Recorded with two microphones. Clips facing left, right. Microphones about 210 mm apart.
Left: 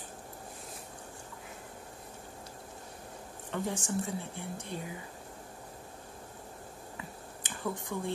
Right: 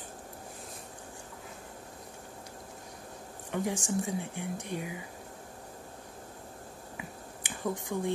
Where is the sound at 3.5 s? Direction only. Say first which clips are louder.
Right 2 dB; 15° right (ahead or behind).